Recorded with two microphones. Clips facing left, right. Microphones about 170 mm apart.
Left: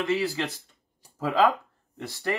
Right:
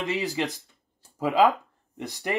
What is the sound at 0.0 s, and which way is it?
Speech, 20° right (ahead or behind).